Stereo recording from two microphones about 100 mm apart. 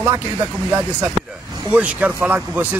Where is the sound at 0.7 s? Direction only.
15° right (ahead or behind).